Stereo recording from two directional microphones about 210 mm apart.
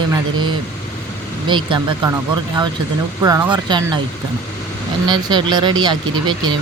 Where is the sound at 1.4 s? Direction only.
20° right (ahead or behind).